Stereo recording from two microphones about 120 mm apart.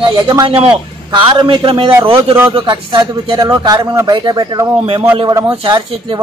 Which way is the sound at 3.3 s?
35° right (ahead or behind).